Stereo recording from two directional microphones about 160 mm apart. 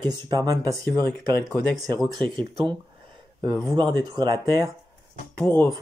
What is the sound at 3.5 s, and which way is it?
Mantra, 10° left (ahead or behind).